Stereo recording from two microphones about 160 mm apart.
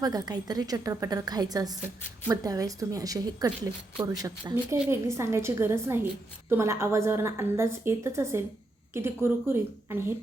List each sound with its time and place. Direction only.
0.0 s a woman's voice: 25° right (ahead or behind)